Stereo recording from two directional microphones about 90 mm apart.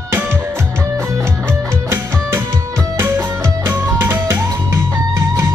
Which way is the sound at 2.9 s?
25° right (ahead or behind).